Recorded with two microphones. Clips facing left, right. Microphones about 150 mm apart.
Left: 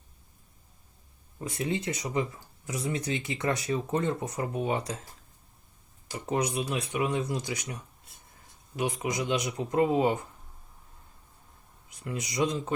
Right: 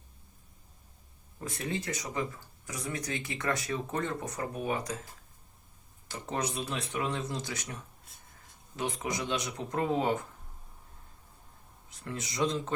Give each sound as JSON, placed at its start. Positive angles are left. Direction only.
{"t": 1.4, "sound": "speech", "side_deg": 20}
{"t": 6.1, "sound": "speech", "side_deg": 15}
{"t": 8.7, "sound": "speech", "side_deg": 15}
{"t": 12.3, "sound": "speech", "side_deg": 15}